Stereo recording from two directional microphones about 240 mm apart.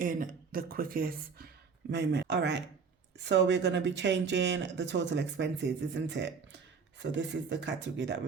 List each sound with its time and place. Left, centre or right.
0.0 s speech: right